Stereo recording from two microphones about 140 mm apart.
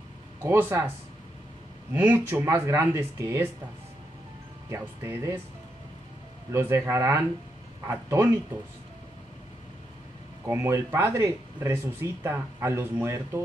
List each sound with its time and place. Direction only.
0.4 s speech: 15° right (ahead or behind)
1.9 s speech: 15° right (ahead or behind)
4.6 s speech: 20° right (ahead or behind)
6.5 s speech: 20° right (ahead or behind)
10.4 s speech: 20° right (ahead or behind)